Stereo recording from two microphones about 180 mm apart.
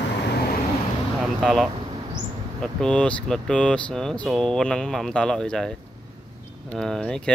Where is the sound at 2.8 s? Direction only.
5° left (ahead or behind).